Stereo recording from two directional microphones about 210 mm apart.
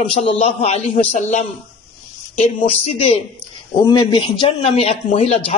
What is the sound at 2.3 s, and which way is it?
A man's voice, 35° left (ahead or behind).